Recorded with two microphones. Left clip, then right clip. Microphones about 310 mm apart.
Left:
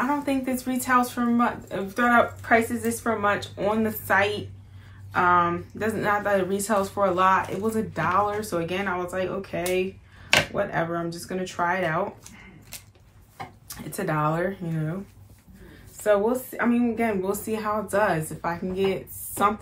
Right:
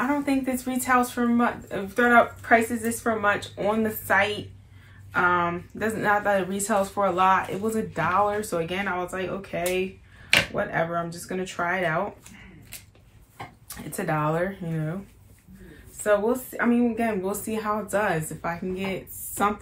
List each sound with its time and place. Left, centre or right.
0.0 s speech: centre
13.7 s speech: centre
16.0 s speech: centre